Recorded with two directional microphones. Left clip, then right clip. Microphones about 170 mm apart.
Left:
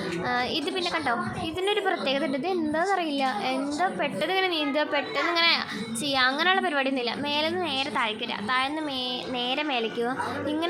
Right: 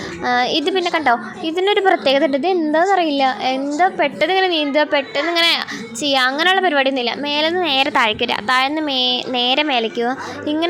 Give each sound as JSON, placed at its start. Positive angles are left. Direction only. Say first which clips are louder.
{"t": 0.3, "sound": "a woman's voice", "louder": "right 12 dB", "side_deg": -35}